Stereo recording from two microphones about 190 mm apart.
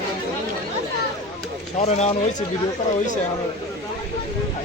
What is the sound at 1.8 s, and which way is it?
Speech, 35° left (ahead or behind).